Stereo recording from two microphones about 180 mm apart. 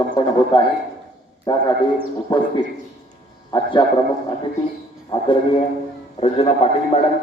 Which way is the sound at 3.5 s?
25° left (ahead or behind).